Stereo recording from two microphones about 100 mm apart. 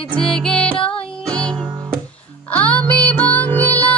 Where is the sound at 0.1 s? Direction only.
5° left (ahead or behind).